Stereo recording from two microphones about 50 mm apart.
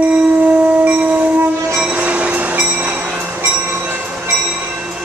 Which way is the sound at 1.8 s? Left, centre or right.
Right.